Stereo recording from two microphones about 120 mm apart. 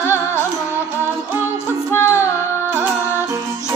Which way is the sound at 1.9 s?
20° left (ahead or behind).